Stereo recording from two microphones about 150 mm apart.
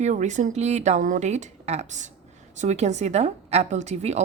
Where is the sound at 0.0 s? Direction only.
50° right (ahead or behind).